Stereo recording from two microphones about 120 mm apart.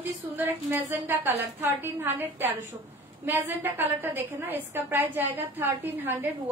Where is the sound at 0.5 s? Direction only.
20° right (ahead or behind).